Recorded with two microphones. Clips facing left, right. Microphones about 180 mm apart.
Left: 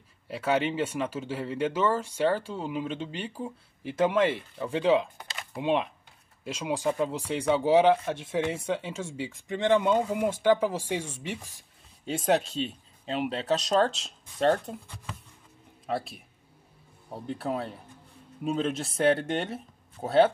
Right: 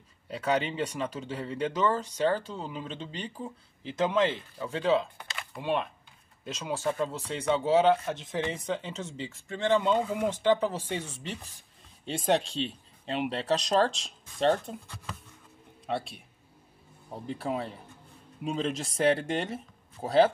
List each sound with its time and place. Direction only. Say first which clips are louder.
0.3 s speech: left 2 dB; 5° left (ahead or behind)
15.9 s speech: left 1 dB; centre (ahead or behind)